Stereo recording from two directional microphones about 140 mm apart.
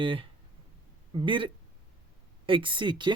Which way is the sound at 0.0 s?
40° right (ahead or behind).